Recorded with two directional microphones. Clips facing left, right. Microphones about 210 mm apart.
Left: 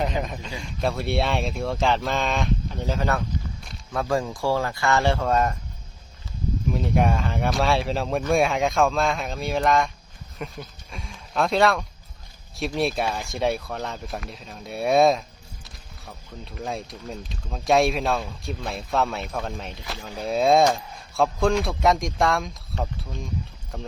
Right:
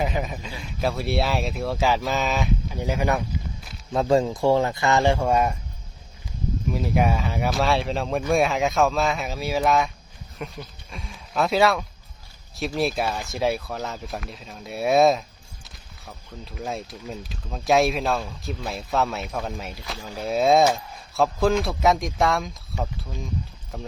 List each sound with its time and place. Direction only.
0.0 s speech: 5° right (ahead or behind)
6.7 s speech: 5° right (ahead or behind)